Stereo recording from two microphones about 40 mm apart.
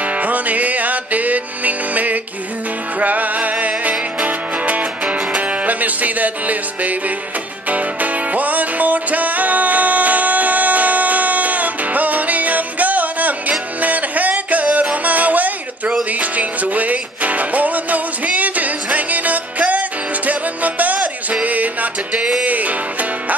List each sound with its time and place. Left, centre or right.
0.0 s music: right